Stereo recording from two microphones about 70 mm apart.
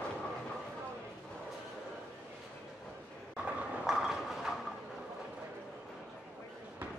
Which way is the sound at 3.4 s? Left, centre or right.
Centre.